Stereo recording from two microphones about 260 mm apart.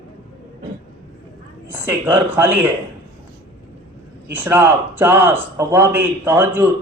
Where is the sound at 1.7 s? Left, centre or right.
Centre.